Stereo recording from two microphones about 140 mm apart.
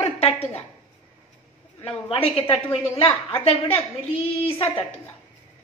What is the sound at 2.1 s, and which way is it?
A woman's voice, 45° left (ahead or behind).